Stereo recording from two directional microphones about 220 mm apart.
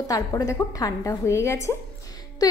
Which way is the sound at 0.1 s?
15° left (ahead or behind).